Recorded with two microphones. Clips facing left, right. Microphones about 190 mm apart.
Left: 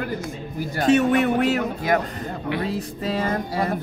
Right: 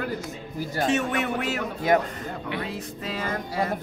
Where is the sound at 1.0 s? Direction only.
40° left (ahead or behind).